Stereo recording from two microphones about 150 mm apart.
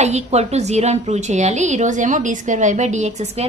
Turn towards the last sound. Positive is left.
turn(degrees=-50)  # may be behind; listen again after turning